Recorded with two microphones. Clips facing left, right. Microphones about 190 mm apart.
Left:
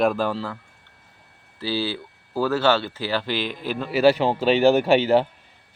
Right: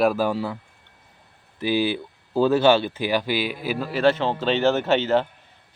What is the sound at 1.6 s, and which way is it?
Speech, 15° right (ahead or behind).